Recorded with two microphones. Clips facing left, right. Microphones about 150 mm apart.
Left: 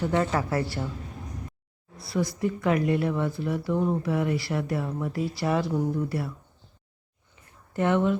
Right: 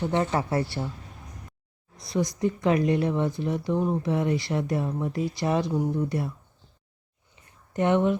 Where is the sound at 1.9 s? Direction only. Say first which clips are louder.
Right 1 dB; 20° right (ahead or behind).